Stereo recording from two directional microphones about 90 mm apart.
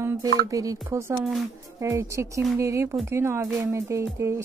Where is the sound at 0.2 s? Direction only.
40° right (ahead or behind).